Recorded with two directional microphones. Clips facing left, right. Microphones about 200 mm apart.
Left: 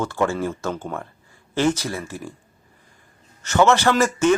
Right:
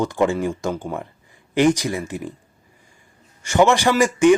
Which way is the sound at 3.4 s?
15° right (ahead or behind).